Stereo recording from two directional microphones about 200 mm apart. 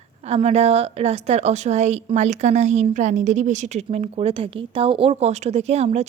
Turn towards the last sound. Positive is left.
turn(degrees=-35)  # may be behind; listen again after turning